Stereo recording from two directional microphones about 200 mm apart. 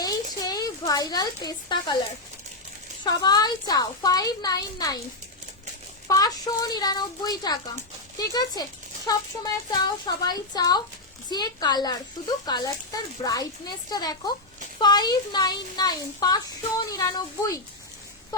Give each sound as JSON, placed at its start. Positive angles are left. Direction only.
{"t": 0.0, "sound": "a sound", "side_deg": 20}
{"t": 3.0, "sound": "speech", "side_deg": 20}
{"t": 6.1, "sound": "speech", "side_deg": 20}